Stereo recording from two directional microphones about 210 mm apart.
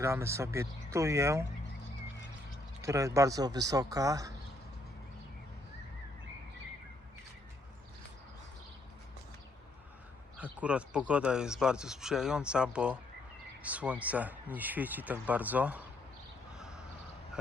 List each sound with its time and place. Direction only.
0.0 s speech: 15° right (ahead or behind)
2.8 s speech: 15° right (ahead or behind)
10.3 s speech: 5° right (ahead or behind)
16.6 s a sound: 5° right (ahead or behind)